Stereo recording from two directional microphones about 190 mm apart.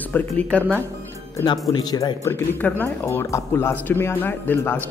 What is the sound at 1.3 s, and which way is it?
Speech, 20° left (ahead or behind).